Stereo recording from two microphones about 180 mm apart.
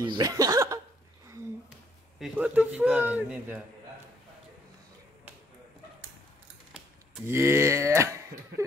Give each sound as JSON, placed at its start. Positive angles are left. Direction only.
{"t": 0.0, "sound": "a sound", "side_deg": -20}
{"t": 2.1, "sound": "a man's voice", "side_deg": -5}
{"t": 7.2, "sound": "a man's voice", "side_deg": -15}